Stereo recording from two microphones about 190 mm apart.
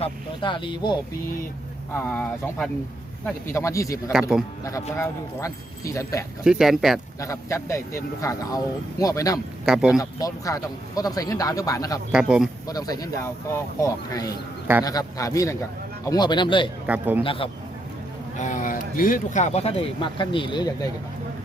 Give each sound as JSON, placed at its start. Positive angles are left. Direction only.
{"t": 0.0, "sound": "speech", "side_deg": 25}
{"t": 1.9, "sound": "speech", "side_deg": 10}
{"t": 4.1, "sound": "speech", "side_deg": -5}
{"t": 4.6, "sound": "speech", "side_deg": 15}
{"t": 6.4, "sound": "speech", "side_deg": 0}
{"t": 7.2, "sound": "speech", "side_deg": 15}
{"t": 9.6, "sound": "speech", "side_deg": -5}
{"t": 10.0, "sound": "speech", "side_deg": 20}
{"t": 12.1, "sound": "speech", "side_deg": -5}
{"t": 12.6, "sound": "speech", "side_deg": 20}
{"t": 16.8, "sound": "a man's voice", "side_deg": -10}
{"t": 17.2, "sound": "speech", "side_deg": 30}
{"t": 18.3, "sound": "speech", "side_deg": 40}